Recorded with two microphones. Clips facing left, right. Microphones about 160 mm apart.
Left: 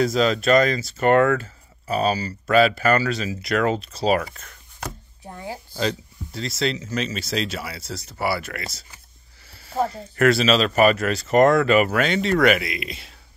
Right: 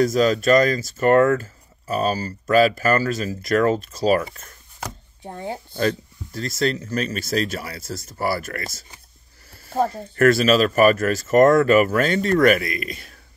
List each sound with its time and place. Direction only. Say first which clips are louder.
0.0 s speech: right 2 dB; 45° right (ahead or behind)
5.2 s speech: right 4 dB; 25° right (ahead or behind)
5.8 s speech: right 3 dB; 50° right (ahead or behind)
9.5 s a sound: right 2 dB; 45° right (ahead or behind)
10.1 s speech: right 2 dB; 45° right (ahead or behind)